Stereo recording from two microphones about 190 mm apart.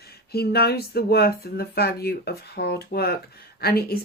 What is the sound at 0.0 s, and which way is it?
Speech, 55° left (ahead or behind).